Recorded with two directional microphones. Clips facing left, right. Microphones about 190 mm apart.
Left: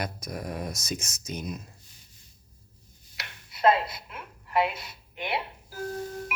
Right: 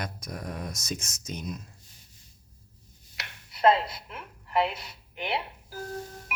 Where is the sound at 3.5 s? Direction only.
35° right (ahead or behind).